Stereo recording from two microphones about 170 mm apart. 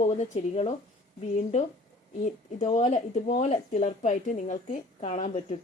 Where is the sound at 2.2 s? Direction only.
45° left (ahead or behind).